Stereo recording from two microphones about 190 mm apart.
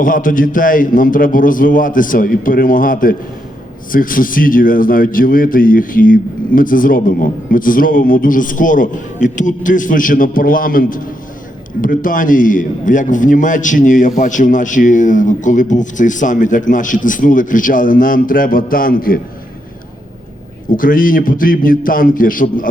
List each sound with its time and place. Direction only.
0.0 s a man's voice: 45° left (ahead or behind)
20.7 s a man's voice: 45° left (ahead or behind)